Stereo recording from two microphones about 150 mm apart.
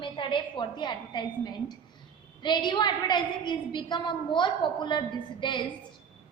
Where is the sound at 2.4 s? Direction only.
30° left (ahead or behind).